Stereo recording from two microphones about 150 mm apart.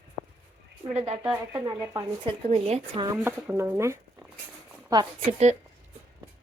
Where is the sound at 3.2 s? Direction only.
15° right (ahead or behind).